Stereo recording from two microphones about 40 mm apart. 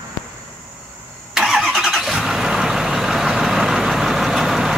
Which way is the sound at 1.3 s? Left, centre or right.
Centre.